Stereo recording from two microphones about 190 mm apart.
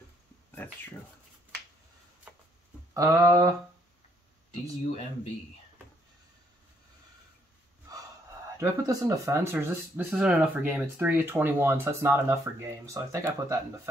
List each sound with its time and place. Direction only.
0.6 s speech: 10° left (ahead or behind)
2.9 s speech: 15° right (ahead or behind)
8.5 s speech: 15° right (ahead or behind)